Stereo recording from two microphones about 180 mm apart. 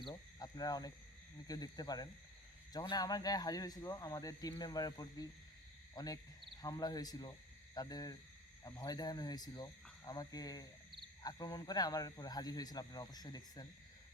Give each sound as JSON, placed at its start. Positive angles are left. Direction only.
{"t": 0.0, "sound": "wild animals", "side_deg": 20}
{"t": 1.5, "sound": "speech", "side_deg": 20}